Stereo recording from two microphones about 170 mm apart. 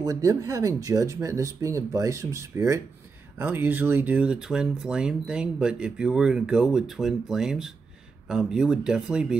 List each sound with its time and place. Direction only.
0.0 s speech: 20° right (ahead or behind); by 9.4 s 5° right (ahead or behind)